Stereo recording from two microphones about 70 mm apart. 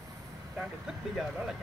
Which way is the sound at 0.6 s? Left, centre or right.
Centre.